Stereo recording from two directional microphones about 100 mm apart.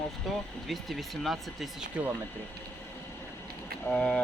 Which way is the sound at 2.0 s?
10° right (ahead or behind).